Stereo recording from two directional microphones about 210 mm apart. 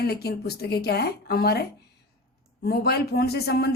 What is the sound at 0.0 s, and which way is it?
Speech, 50° left (ahead or behind).